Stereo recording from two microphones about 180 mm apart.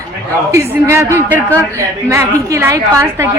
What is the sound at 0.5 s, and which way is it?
A woman's voice, 15° right (ahead or behind).